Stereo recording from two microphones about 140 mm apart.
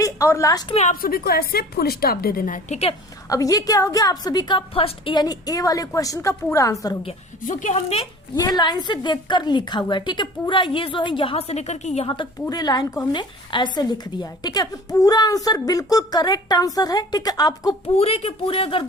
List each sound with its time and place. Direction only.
0.0 s a woman's voice: 20° left (ahead or behind)
0.7 s speech: 50° left (ahead or behind)
1.0 s a woman's voice: 90° left; by 2.7 s 75° left (ahead or behind)
3.2 s a woman's voice: 25° left (ahead or behind)
7.4 s a woman's voice: 65° left (ahead or behind)
8.4 s a woman's voice: 30° left (ahead or behind)
17.8 s speech: 45° left (ahead or behind)